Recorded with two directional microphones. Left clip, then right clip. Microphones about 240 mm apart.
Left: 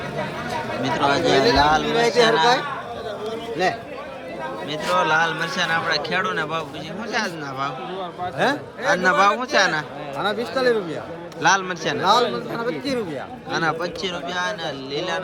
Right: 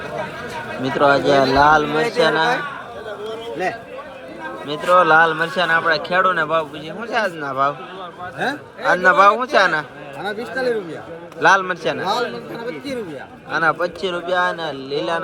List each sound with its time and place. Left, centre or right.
0.8 s a man's voice: centre
4.7 s a man's voice: centre
13.5 s a man's voice: centre